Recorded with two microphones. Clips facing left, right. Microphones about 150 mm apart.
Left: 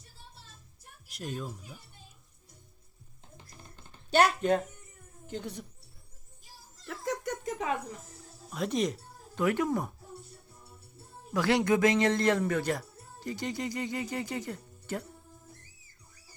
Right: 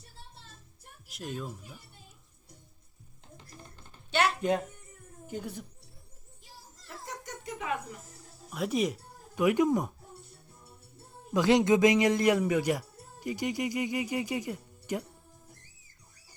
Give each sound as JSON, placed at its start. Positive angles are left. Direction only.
{"t": 1.0, "sound": "a woman's voice", "side_deg": 0}
{"t": 4.1, "sound": "speech", "side_deg": 40}
{"t": 4.4, "sound": "speech", "side_deg": -15}
{"t": 6.8, "sound": "a sound", "side_deg": 90}
{"t": 7.4, "sound": "a sound", "side_deg": 35}
{"t": 8.4, "sound": "speech", "side_deg": -5}
{"t": 11.3, "sound": "speech", "side_deg": -20}